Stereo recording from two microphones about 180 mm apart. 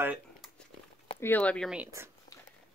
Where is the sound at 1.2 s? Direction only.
10° left (ahead or behind).